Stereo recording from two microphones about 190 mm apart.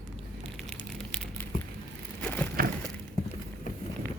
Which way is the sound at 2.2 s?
10° left (ahead or behind).